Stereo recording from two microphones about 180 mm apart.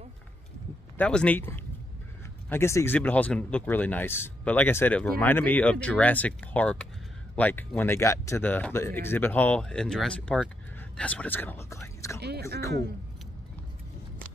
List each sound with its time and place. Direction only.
0.9 s speech: 5° left (ahead or behind)
12.2 s speech: 65° right (ahead or behind)